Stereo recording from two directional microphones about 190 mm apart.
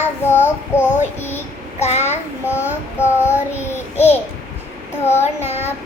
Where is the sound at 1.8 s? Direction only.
35° left (ahead or behind).